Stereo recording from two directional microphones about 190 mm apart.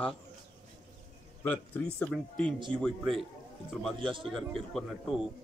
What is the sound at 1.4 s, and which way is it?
A man's voice, 10° left (ahead or behind).